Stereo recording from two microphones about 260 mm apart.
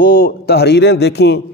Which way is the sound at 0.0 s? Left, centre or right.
Left.